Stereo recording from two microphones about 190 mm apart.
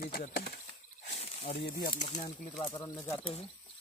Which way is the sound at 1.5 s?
65° left (ahead or behind).